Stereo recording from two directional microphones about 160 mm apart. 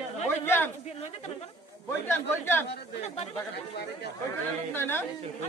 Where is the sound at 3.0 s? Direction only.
40° left (ahead or behind).